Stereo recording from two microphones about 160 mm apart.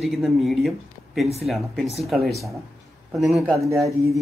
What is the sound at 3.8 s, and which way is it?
Speech, 20° right (ahead or behind).